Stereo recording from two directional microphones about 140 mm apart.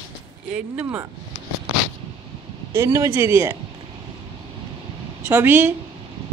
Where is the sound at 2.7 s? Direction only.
20° right (ahead or behind).